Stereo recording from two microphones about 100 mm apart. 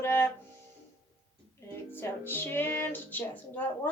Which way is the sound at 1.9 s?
20° left (ahead or behind).